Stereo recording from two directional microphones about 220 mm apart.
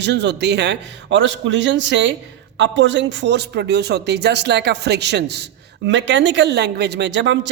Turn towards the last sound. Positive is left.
turn(degrees=-55)  # may be behind; listen again after turning